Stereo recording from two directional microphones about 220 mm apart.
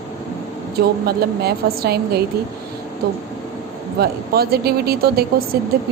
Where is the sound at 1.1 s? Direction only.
45° right (ahead or behind).